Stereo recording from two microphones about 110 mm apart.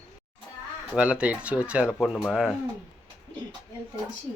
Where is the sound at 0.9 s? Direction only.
10° right (ahead or behind).